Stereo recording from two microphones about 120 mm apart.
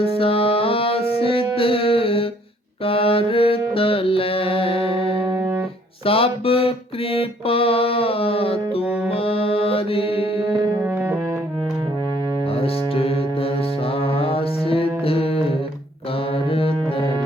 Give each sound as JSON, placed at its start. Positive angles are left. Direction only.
{"t": 0.0, "sound": "music", "side_deg": 50}
{"t": 2.8, "sound": "mantra", "side_deg": 50}
{"t": 5.2, "sound": "music", "side_deg": -20}
{"t": 6.1, "sound": "music", "side_deg": 50}
{"t": 10.8, "sound": "music", "side_deg": -15}
{"t": 12.5, "sound": "music", "side_deg": 55}
{"t": 16.5, "sound": "music", "side_deg": 50}